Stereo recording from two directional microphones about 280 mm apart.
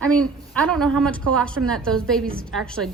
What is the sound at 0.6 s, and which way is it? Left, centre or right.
Speech, centre.